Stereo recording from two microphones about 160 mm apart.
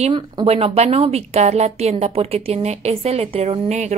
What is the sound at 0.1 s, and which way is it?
A woman's voice, 35° right (ahead or behind).